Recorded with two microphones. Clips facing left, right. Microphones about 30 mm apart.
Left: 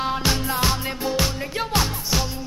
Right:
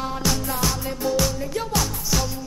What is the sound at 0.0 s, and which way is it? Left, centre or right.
Music, left.